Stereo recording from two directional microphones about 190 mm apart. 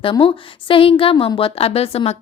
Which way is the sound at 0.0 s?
25° left (ahead or behind).